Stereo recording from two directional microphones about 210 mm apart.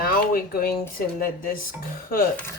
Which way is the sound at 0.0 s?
45° left (ahead or behind).